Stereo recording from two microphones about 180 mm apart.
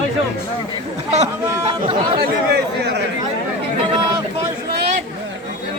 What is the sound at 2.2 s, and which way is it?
Speech, 65° right (ahead or behind).